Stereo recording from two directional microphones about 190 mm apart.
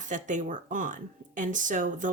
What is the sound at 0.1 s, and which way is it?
Speech, 40° right (ahead or behind).